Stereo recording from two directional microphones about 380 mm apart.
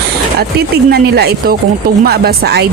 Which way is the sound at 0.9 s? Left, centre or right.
Right.